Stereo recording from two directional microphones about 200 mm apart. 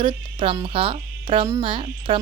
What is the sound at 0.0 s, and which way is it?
Speech, 25° right (ahead or behind).